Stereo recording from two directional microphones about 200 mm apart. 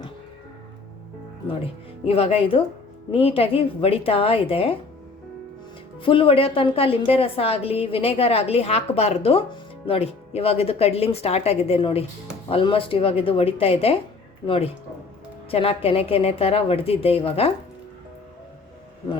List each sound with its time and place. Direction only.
2.0 s a woman's voice: 30° left (ahead or behind)
6.0 s a woman's voice: 25° left (ahead or behind)